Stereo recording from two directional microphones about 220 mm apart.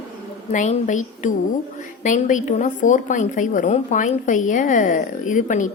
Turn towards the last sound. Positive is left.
turn(degrees=35)  # may be behind; listen again after turning